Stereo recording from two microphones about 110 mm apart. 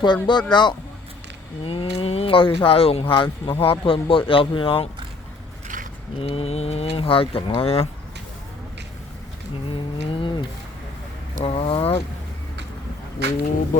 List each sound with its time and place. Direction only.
0.0 s speech: 45° left (ahead or behind)
6.1 s speech: 65° left (ahead or behind)
9.6 s cattle: 55° left (ahead or behind)
11.3 s speech: 65° left (ahead or behind)